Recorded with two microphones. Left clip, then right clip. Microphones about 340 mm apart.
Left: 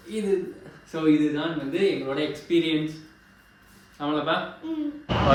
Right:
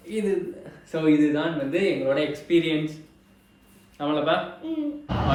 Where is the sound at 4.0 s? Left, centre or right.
Centre.